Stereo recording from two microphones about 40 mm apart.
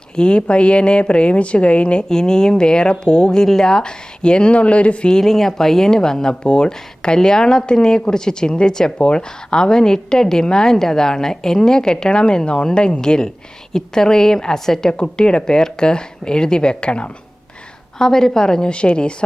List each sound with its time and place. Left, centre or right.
0.2 s speech: left
2.0 s speech: centre; by 5.1 s left
5.2 s a woman's voice: centre; by 17.1 s left
17.9 s a woman's voice: centre
18.7 s speech: left